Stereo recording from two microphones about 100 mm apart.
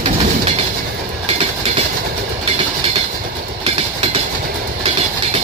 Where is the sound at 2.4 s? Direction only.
75° right (ahead or behind).